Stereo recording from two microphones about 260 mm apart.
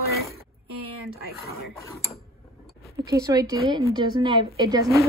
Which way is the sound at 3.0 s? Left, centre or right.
Centre.